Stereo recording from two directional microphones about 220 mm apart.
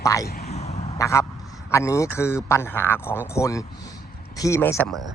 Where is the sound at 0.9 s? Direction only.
15° left (ahead or behind).